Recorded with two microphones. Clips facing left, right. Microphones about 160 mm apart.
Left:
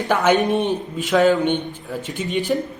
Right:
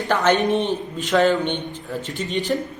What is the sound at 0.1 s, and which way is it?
Speech, 10° left (ahead or behind).